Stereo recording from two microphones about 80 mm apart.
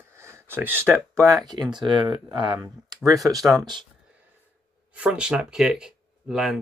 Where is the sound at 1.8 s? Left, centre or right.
Right.